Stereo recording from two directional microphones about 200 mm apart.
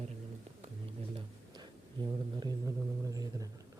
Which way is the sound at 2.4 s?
20° right (ahead or behind).